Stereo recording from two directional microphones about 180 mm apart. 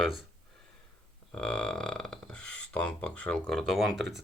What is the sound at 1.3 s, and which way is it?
Speech, 5° left (ahead or behind).